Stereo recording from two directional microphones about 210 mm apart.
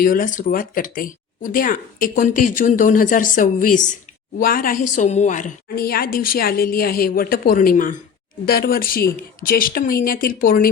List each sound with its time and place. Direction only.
0.0 s a woman's voice: 40° left (ahead or behind)